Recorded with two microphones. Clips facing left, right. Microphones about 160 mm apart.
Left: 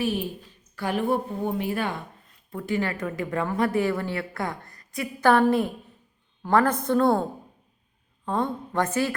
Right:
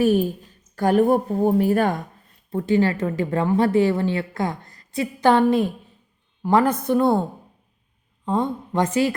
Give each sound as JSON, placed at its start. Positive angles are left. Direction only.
{"t": 0.0, "sound": "a woman's voice", "side_deg": -45}
{"t": 2.5, "sound": "a woman's voice", "side_deg": -30}
{"t": 8.2, "sound": "a woman's voice", "side_deg": -15}